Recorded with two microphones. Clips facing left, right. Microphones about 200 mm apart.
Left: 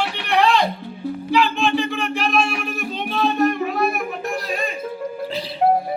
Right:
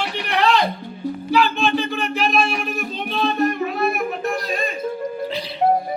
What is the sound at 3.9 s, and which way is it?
Child singing, centre (ahead or behind).